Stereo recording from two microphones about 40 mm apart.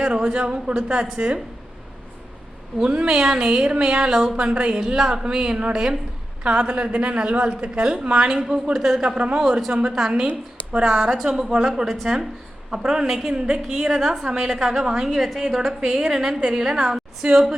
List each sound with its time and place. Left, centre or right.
0.0 s a woman's voice: right
0.7 s a woman's voice: right
1.0 s a woman's voice: right
2.8 s a woman's voice: right
6.4 s a woman's voice: right; by 10.1 s centre
10.7 s speech: right
13.3 s a woman's voice: right
13.7 s speech: centre
15.1 s a woman's voice: centre; by 17.4 s right